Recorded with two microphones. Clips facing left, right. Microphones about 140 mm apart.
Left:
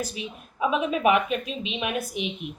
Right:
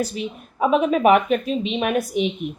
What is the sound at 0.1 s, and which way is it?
Speech, 50° right (ahead or behind).